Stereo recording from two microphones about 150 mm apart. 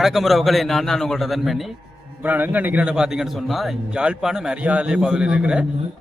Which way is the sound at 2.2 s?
10° right (ahead or behind).